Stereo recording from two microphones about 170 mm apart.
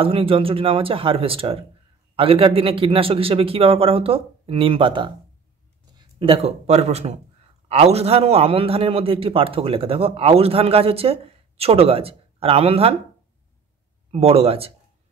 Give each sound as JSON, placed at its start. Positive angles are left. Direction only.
{"t": 0.0, "sound": "a man's voice", "side_deg": -30}
{"t": 14.1, "sound": "a man's voice", "side_deg": -35}